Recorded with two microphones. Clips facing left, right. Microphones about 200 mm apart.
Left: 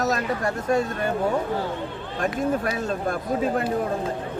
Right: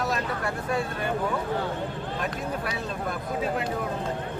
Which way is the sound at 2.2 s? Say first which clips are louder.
Left 9 dB; 45° left (ahead or behind).